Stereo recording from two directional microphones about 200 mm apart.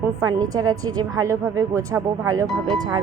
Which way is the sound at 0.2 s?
20° right (ahead or behind).